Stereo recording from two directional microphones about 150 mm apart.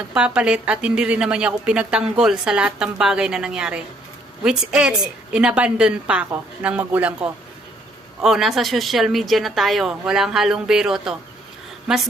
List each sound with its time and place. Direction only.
0.1 s a woman's voice: 5° right (ahead or behind)